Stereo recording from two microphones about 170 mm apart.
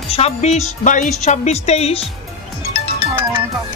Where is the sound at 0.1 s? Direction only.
40° left (ahead or behind).